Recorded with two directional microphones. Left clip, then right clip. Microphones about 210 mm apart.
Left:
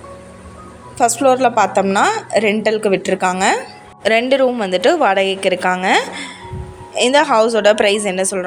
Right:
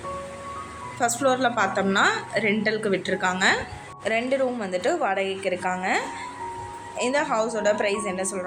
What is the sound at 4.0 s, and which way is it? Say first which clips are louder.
A woman's voice: left 10 dB; 45° left (ahead or behind).